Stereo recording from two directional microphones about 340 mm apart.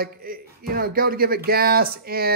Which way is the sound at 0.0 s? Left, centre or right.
Right.